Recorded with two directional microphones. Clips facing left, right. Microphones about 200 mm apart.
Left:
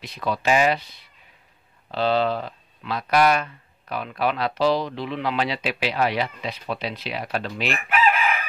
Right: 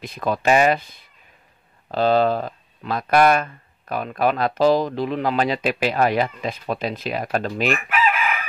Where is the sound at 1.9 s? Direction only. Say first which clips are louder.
Right 4 dB; 45° right (ahead or behind).